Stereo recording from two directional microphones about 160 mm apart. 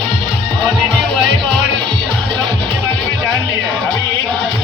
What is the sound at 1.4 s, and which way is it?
Music, 30° right (ahead or behind).